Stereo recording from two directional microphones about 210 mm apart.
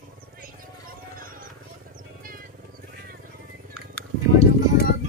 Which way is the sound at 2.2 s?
45° right (ahead or behind).